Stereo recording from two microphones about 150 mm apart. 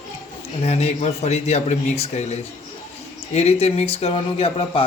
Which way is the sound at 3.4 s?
45° left (ahead or behind).